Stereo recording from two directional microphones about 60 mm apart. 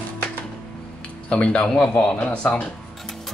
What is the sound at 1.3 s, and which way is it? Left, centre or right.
Speech, centre.